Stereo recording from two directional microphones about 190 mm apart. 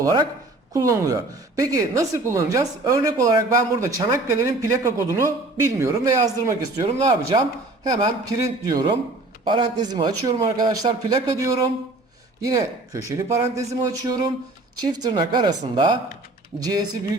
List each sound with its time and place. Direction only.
0.0 s a woman's voice: 20° right (ahead or behind)